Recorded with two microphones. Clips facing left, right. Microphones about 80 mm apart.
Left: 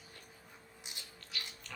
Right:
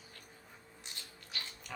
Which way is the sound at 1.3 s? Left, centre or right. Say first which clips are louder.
Even; right.